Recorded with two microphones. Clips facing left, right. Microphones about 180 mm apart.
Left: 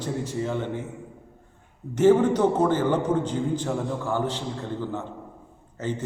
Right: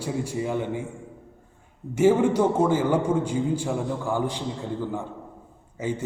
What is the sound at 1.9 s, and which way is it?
A man's voice, 10° right (ahead or behind).